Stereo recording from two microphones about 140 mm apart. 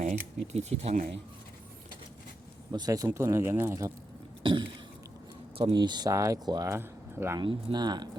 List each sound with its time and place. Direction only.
0.0 s speech: 50° right (ahead or behind)
2.7 s speech: 30° right (ahead or behind)
4.4 s speech: 35° right (ahead or behind)
6.7 s speech: 15° right (ahead or behind)
7.3 s speech: 30° right (ahead or behind)